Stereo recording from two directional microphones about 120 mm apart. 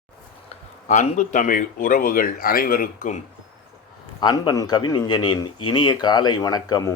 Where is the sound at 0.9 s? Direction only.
85° left.